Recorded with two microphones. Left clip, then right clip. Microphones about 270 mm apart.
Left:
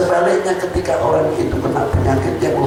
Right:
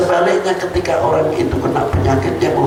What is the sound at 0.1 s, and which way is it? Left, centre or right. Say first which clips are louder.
A man's voice: right 1 dB; centre.